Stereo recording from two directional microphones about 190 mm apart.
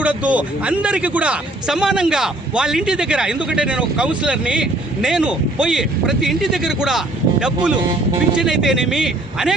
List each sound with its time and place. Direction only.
0.0 s speech: 5° right (ahead or behind)